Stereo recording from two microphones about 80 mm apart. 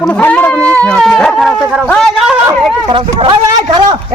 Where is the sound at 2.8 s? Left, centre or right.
Right.